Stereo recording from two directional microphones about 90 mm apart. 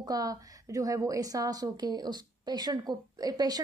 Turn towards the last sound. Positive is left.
turn(degrees=-45)  # may be behind; listen again after turning